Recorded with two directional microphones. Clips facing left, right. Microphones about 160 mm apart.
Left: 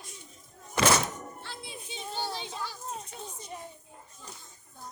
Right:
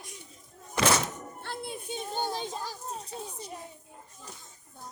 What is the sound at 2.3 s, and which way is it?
Children playing, 45° right (ahead or behind).